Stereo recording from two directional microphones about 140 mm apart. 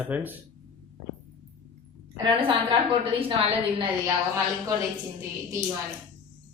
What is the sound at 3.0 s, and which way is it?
Speech, 40° right (ahead or behind).